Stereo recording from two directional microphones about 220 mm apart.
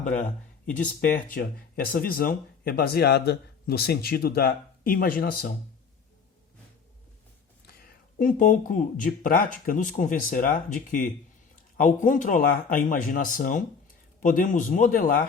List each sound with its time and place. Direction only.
0.7 s speech: 35° left (ahead or behind)
8.2 s speech: 40° left (ahead or behind)